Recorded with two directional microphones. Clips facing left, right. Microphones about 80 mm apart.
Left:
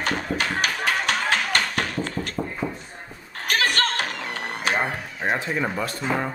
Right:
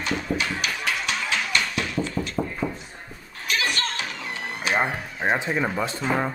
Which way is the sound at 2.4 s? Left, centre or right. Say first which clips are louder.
Right 2 dB; centre.